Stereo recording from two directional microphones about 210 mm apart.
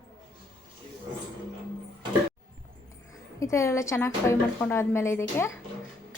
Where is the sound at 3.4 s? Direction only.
15° left (ahead or behind).